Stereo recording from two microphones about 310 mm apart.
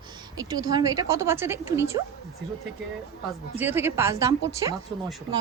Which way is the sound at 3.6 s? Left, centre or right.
Centre.